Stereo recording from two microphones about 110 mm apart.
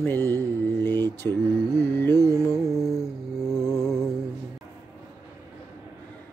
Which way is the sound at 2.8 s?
5° right (ahead or behind).